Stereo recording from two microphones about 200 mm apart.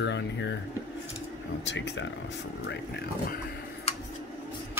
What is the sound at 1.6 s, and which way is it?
Speech, 60° left (ahead or behind).